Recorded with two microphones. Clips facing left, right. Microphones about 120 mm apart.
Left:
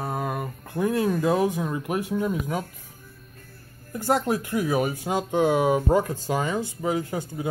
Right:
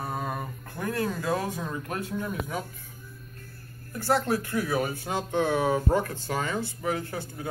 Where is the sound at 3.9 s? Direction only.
20° left (ahead or behind).